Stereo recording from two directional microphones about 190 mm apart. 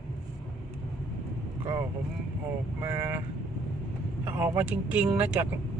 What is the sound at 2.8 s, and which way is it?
Speech, 10° right (ahead or behind).